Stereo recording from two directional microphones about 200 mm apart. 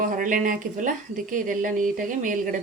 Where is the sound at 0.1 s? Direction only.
40° right (ahead or behind).